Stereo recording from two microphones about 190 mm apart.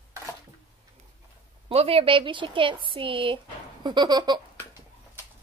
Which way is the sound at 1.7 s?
30° right (ahead or behind).